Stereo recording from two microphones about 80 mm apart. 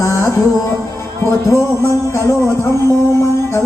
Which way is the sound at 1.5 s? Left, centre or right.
Left.